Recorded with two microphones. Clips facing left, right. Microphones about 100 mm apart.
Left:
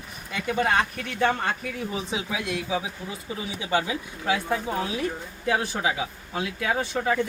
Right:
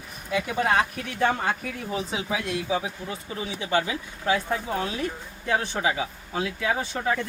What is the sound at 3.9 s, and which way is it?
Speech, 15° left (ahead or behind).